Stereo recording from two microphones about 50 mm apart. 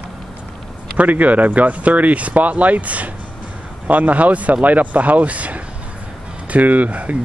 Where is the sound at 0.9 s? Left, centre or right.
Right.